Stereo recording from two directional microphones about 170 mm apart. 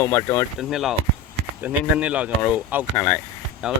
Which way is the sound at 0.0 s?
20° left (ahead or behind).